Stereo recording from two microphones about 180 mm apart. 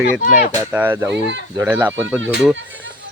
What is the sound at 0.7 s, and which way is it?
Speech, 10° right (ahead or behind).